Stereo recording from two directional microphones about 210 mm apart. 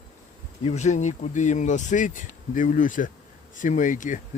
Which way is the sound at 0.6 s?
30° left (ahead or behind).